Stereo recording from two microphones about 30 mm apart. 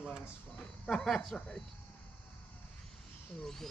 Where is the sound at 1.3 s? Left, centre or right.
Left.